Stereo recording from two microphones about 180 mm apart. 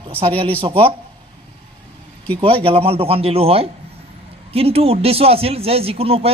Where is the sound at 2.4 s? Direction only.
30° right (ahead or behind).